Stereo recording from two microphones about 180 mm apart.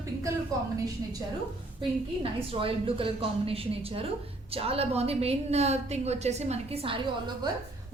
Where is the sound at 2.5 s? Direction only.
30° right (ahead or behind).